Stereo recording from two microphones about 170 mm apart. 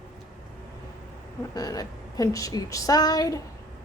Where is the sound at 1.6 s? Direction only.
20° left (ahead or behind).